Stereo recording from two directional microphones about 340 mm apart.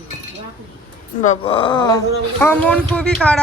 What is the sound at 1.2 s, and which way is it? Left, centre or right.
A woman's voice, centre.